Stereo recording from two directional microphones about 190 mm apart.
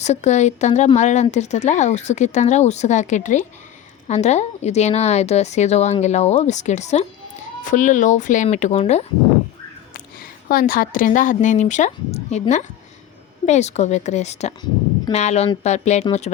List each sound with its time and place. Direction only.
0.0 s speech: 35° left (ahead or behind)
9.9 s speech: 50° left (ahead or behind)